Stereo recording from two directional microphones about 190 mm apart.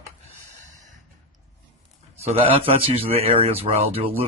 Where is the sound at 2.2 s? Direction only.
30° right (ahead or behind).